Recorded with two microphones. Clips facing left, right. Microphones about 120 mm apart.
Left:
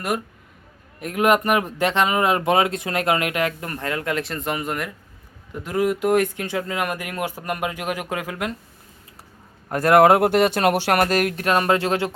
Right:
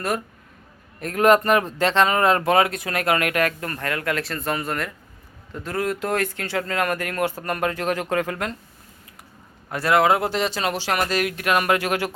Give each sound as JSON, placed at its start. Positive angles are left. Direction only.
{"t": 0.9, "sound": "speech", "side_deg": 15}
{"t": 9.6, "sound": "speech", "side_deg": 45}